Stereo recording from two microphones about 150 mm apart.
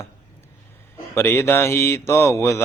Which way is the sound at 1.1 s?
15° left (ahead or behind).